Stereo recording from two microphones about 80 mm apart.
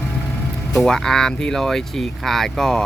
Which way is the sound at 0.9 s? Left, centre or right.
Centre.